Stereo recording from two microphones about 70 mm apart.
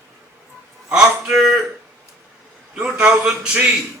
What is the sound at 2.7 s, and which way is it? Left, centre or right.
Speech, centre.